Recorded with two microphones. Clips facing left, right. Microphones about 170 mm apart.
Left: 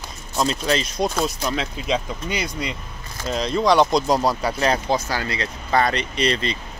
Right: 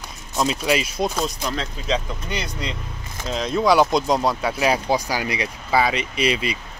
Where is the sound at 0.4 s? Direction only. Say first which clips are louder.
Right 1 dB; 5° right (ahead or behind); by 2.7 s 15° left (ahead or behind).